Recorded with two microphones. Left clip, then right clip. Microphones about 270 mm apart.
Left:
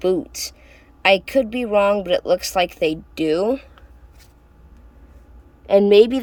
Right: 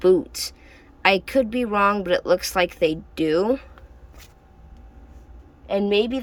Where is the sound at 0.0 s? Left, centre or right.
Centre.